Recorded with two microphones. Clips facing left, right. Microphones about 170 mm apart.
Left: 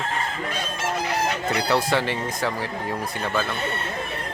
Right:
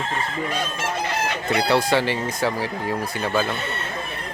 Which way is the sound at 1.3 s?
65° right (ahead or behind).